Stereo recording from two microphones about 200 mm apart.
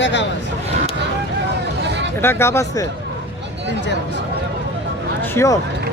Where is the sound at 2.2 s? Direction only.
10° left (ahead or behind).